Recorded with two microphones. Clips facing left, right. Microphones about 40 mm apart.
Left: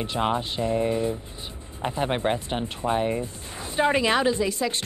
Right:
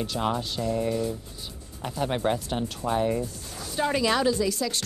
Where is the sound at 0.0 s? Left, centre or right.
Left.